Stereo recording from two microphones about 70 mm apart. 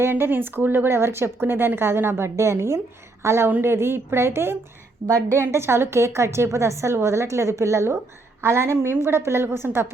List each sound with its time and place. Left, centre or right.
0.0 s speech: right
5.0 s a woman's voice: right
5.4 s speech: right